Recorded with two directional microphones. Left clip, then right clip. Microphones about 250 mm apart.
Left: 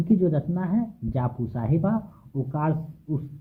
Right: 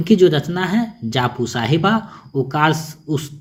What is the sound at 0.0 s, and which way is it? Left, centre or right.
Speech, centre.